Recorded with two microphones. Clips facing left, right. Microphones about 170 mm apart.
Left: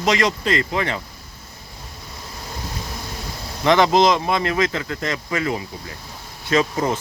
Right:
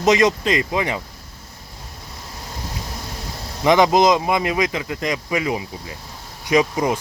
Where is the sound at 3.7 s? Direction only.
15° right (ahead or behind).